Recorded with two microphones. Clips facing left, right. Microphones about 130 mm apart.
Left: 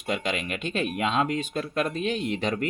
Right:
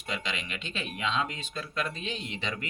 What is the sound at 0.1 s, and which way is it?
Speech, 50° left (ahead or behind).